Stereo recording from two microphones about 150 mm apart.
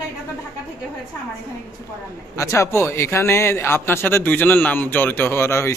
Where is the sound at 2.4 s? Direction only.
20° left (ahead or behind).